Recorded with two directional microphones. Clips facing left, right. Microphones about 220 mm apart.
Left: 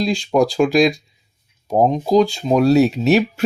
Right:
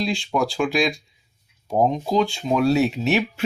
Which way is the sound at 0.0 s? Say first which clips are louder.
Left 6 dB; 40° left (ahead or behind).